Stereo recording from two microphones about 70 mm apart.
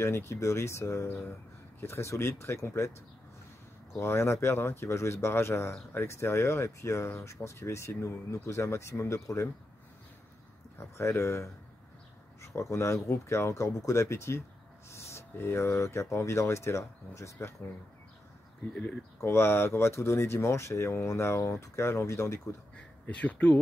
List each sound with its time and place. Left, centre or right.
0.0 s speech: left
3.9 s speech: left
10.8 s speech: left
18.7 s speech: left
19.2 s speech: left
22.8 s speech: centre